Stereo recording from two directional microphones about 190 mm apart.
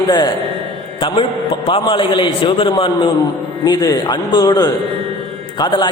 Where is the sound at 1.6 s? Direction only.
25° left (ahead or behind).